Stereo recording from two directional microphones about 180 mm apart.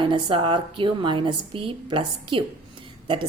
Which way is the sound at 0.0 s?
25° right (ahead or behind).